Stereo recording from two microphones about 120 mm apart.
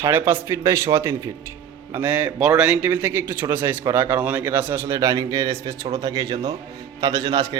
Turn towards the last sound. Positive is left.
turn(degrees=-35)  # may be behind; listen again after turning